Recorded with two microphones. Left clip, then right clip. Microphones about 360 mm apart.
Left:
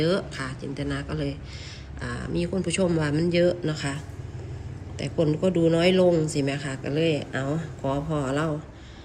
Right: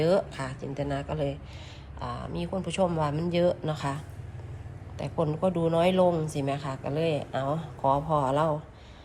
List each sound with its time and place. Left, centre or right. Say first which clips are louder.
0.0 s speech: right 1 dB; centre
5.0 s speech: left 5 dB; centre
5.4 s speech: left 3 dB; right
5.9 s speech: left 4 dB; centre